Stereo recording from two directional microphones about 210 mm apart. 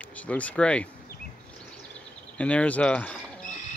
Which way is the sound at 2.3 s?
5° left (ahead or behind).